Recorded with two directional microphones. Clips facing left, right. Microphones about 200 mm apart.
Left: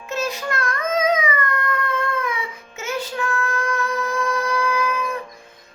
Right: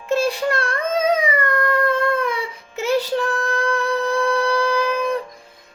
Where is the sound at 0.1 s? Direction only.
30° right (ahead or behind).